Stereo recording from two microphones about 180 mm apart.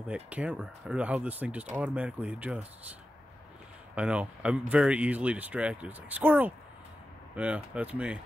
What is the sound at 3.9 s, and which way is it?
Speech, 5° right (ahead or behind).